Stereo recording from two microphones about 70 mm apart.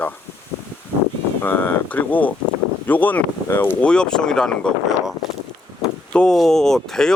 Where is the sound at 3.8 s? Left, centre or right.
Centre.